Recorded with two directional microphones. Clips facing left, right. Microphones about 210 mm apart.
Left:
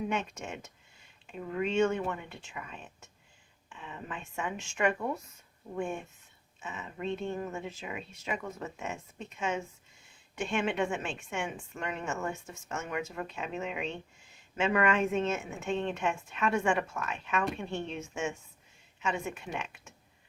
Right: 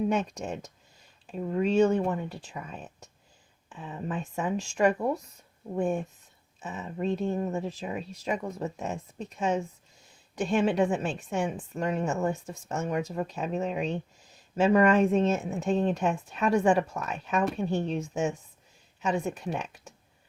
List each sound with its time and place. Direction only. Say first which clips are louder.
0.1 s a woman's voice: right 6 dB; 35° right (ahead or behind)